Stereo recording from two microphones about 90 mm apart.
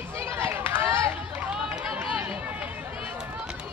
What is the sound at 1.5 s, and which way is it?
Run, 10° right (ahead or behind).